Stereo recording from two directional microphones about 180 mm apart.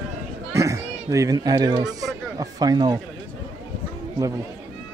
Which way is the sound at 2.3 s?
20° right (ahead or behind).